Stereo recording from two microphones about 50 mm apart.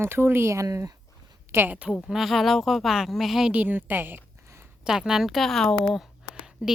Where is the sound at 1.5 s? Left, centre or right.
Right.